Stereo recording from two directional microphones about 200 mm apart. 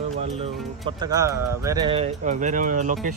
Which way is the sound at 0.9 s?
20° right (ahead or behind).